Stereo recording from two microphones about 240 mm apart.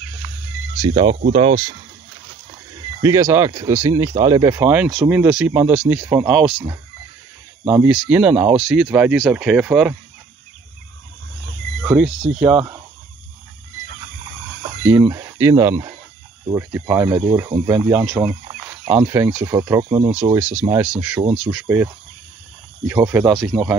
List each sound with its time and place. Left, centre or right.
0.7 s speech: centre
3.0 s speech: centre
7.6 s speech: centre
11.8 s cricket: centre
12.4 s speech: centre
14.9 s speech: centre